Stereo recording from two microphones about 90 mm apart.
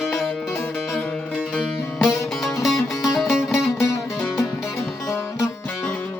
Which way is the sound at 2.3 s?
5° left (ahead or behind).